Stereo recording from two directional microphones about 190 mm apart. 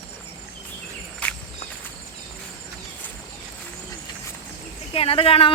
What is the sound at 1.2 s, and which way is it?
Walk, 5° left (ahead or behind).